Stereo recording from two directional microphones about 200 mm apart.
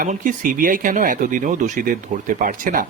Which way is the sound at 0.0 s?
40° right (ahead or behind).